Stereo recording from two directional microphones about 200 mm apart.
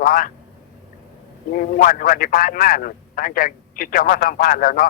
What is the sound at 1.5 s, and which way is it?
A man's voice, 45° left (ahead or behind).